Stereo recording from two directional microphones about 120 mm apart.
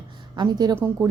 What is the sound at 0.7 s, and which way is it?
Speech, 20° right (ahead or behind).